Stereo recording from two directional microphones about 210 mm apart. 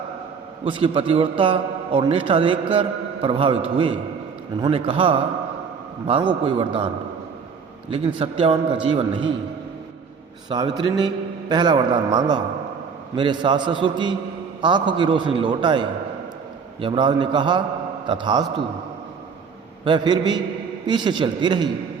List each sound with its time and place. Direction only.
0.6 s a man's voice: 25° right (ahead or behind)
4.6 s a man's voice: 25° right (ahead or behind)
10.5 s a man's voice: 20° right (ahead or behind)
19.8 s a man's voice: 20° right (ahead or behind)